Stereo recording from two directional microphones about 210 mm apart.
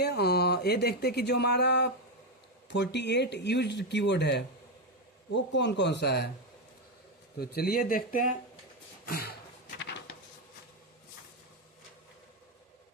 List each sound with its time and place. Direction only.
0.0 s speech: 50° left (ahead or behind)
7.3 s speech: 45° left (ahead or behind)
9.0 s a sound: 45° left (ahead or behind)